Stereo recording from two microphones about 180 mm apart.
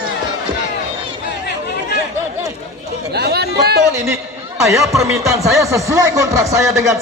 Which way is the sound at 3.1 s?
65° right (ahead or behind).